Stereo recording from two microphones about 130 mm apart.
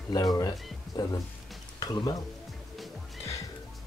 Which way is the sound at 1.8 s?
30° left (ahead or behind).